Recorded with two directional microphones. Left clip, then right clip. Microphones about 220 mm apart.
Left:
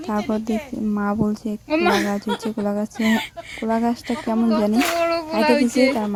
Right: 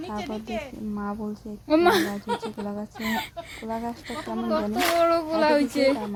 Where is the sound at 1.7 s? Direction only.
10° right (ahead or behind).